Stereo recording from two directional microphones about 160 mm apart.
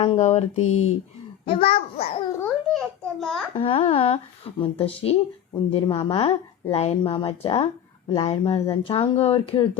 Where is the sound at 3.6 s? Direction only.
35° left (ahead or behind).